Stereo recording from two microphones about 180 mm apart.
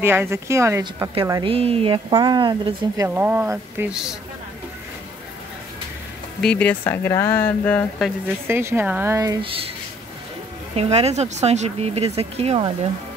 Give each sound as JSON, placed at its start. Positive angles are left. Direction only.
{"t": 0.0, "sound": "speech", "side_deg": -15}
{"t": 1.5, "sound": "speech", "side_deg": -30}
{"t": 3.2, "sound": "speech", "side_deg": -10}
{"t": 6.4, "sound": "speech", "side_deg": 5}
{"t": 8.5, "sound": "speech", "side_deg": -15}
{"t": 10.8, "sound": "speech", "side_deg": -35}